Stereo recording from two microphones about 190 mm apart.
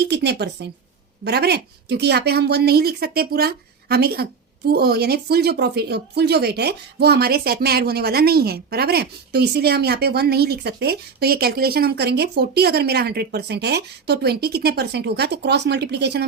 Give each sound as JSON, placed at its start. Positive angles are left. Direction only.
{"t": 0.1, "sound": "a woman's voice", "side_deg": -60}